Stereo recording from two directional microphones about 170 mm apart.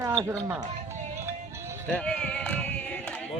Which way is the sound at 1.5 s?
15° right (ahead or behind).